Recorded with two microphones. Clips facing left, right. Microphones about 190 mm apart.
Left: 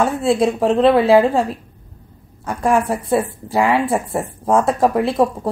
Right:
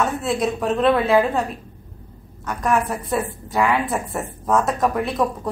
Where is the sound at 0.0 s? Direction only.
30° left (ahead or behind).